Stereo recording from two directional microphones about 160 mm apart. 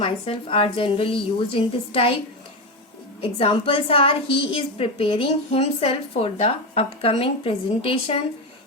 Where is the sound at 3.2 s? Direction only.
35° left (ahead or behind).